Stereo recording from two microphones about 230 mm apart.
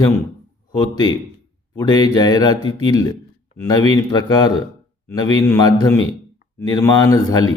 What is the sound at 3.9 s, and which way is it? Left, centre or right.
Speech, centre.